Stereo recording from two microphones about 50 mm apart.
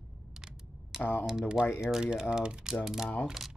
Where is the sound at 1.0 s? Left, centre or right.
Left.